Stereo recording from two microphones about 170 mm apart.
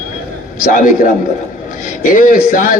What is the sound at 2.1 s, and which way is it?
Speech, 55° left (ahead or behind).